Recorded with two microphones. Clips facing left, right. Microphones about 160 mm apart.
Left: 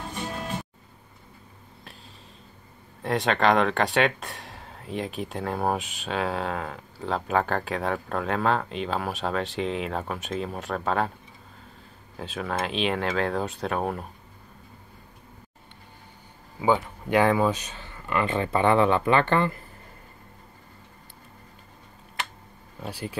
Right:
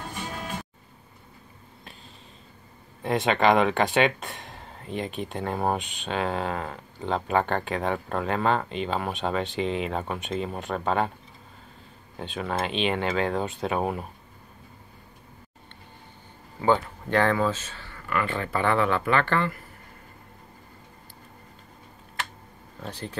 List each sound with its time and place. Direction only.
3.0 s speech: centre (ahead or behind)
12.2 s speech: centre (ahead or behind)
16.6 s speech: 10° left (ahead or behind)
22.8 s speech: 10° left (ahead or behind)